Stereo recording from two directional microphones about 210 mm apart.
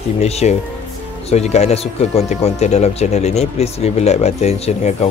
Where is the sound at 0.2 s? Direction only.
30° left (ahead or behind).